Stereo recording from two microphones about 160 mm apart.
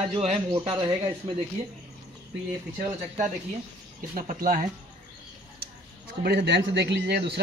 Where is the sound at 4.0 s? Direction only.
60° right (ahead or behind).